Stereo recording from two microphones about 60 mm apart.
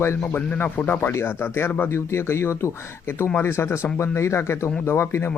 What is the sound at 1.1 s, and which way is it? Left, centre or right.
Speech, left.